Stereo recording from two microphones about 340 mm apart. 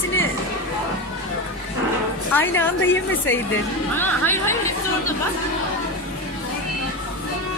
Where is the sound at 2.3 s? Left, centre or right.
Centre.